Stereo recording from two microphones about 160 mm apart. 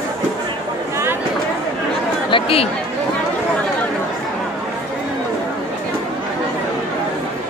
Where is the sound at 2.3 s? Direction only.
35° left (ahead or behind).